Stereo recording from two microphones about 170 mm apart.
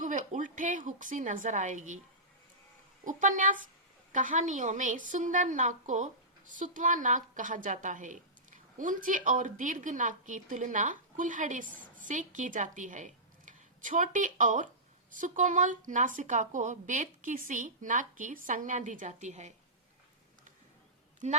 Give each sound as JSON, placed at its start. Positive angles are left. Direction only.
{"t": 0.0, "sound": "a woman's voice", "side_deg": -45}
{"t": 3.0, "sound": "speech", "side_deg": -50}